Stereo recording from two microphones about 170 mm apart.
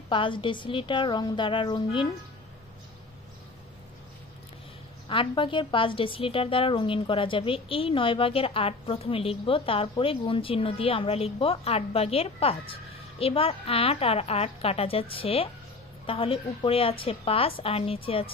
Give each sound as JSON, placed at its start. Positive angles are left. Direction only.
{"t": 0.1, "sound": "a woman's voice", "side_deg": 30}
{"t": 5.0, "sound": "a woman's voice", "side_deg": 30}